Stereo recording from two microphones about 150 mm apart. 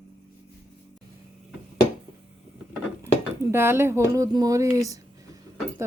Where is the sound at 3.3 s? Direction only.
15° right (ahead or behind).